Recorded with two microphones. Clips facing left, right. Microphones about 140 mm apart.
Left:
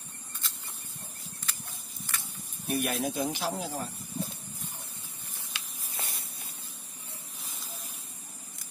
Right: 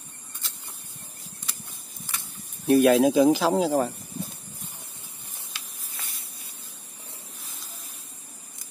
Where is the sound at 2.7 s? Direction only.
90° right.